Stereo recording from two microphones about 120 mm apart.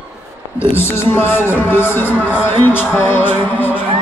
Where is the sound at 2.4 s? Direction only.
15° left (ahead or behind).